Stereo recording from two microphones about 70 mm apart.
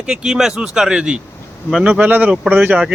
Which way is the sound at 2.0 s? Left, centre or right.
Right.